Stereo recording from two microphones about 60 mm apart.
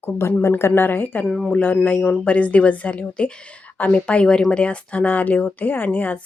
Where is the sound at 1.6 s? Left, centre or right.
Left.